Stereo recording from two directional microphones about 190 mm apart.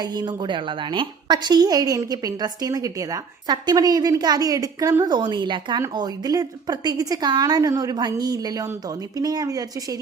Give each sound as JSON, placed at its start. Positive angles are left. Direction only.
{"t": 0.0, "sound": "a woman's voice", "side_deg": -20}